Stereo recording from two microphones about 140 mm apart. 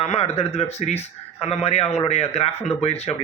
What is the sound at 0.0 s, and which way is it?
Speech, 45° left (ahead or behind).